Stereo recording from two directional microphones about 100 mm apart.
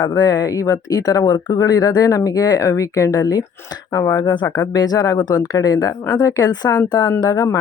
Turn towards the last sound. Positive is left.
turn(degrees=35)  # may be behind; listen again after turning